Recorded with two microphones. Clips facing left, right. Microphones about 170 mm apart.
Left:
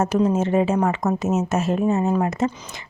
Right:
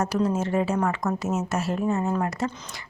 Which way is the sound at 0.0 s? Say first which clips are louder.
Left 5 dB; 20° left (ahead or behind).